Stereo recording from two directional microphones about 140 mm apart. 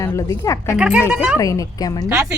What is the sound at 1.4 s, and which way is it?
Speech, 25° left (ahead or behind).